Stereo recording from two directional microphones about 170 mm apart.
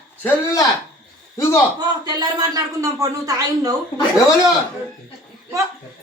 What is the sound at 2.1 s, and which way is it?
Speech, 25° right (ahead or behind).